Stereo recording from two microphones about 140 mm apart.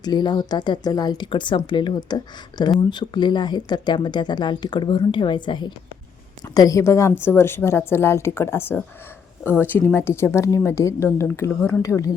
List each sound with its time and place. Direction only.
0.0 s a woman's voice: 30° left (ahead or behind)